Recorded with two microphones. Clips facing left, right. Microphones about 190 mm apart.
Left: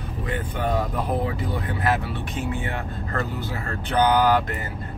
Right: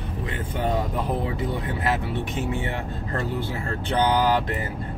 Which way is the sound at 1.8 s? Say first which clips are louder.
Left 2 dB; 20° right (ahead or behind).